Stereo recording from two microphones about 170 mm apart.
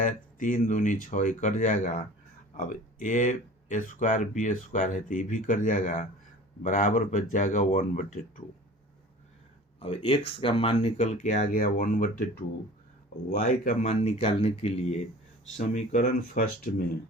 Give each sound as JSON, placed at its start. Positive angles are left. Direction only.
{"t": 0.0, "sound": "speech", "side_deg": 50}
{"t": 9.8, "sound": "speech", "side_deg": 30}
{"t": 11.2, "sound": "speech", "side_deg": 50}
{"t": 13.3, "sound": "speech", "side_deg": 50}